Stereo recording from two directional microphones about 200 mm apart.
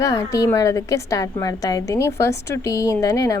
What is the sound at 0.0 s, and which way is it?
A woman's voice, 15° left (ahead or behind).